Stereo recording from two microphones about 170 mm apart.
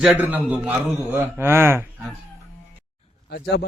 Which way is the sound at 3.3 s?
75° left (ahead or behind).